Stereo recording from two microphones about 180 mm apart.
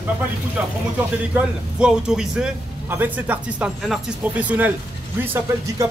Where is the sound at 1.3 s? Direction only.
5° right (ahead or behind).